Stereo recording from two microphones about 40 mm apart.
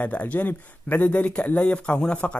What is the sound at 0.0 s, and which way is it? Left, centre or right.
Speech, left.